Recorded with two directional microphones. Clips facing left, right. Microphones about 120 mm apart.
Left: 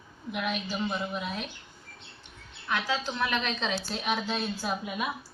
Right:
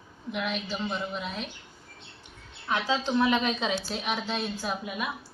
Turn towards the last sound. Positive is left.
turn(degrees=0)  # may be behind; listen again after turning